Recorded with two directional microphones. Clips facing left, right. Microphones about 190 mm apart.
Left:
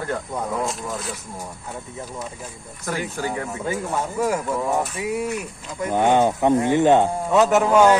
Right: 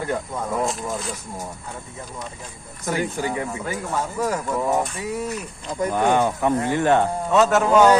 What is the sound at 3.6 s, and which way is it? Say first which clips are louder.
A man's voice: left 1 dB; 15° left (ahead or behind).